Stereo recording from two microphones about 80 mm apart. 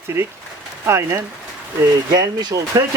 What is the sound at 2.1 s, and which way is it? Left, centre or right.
Speech, right.